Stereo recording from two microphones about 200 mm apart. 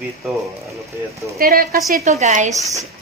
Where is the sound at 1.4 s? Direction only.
50° right (ahead or behind).